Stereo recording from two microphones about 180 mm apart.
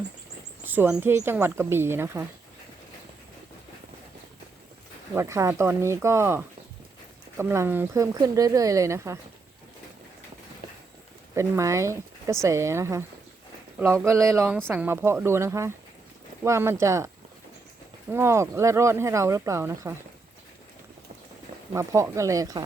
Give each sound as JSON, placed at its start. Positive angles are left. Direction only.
{"t": 0.6, "sound": "speech", "side_deg": -10}
{"t": 5.1, "sound": "speech", "side_deg": -15}
{"t": 11.3, "sound": "speech", "side_deg": -15}
{"t": 18.1, "sound": "speech", "side_deg": -15}
{"t": 21.7, "sound": "speech", "side_deg": -15}